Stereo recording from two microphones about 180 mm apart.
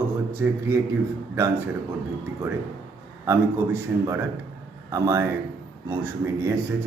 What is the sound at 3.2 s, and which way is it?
Speech, 15° right (ahead or behind).